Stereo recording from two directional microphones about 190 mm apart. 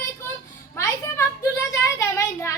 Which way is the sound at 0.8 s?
15° left (ahead or behind).